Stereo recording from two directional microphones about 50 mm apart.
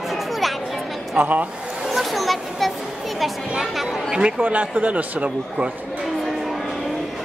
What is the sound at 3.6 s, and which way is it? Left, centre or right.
Chatter, centre.